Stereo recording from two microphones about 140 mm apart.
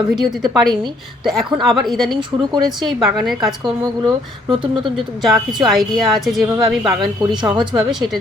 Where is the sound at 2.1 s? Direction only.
30° right (ahead or behind).